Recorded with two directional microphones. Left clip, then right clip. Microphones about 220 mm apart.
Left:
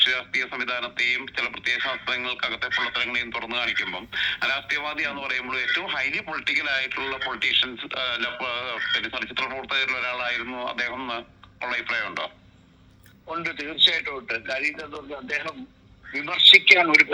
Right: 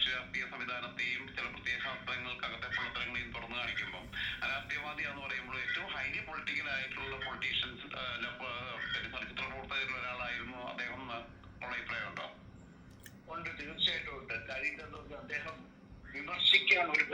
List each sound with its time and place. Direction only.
0.0 s a man's voice: 45° left (ahead or behind)